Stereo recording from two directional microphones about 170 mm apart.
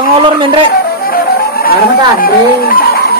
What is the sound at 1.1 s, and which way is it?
Music, 60° left (ahead or behind).